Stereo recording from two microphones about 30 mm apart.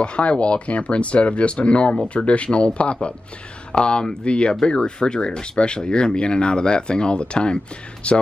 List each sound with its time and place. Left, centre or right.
0.0 s speech: left